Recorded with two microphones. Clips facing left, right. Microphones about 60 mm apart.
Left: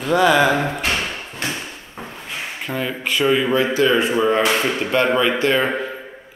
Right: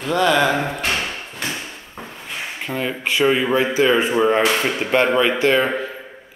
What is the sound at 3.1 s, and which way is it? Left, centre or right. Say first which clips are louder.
Speech: even; right.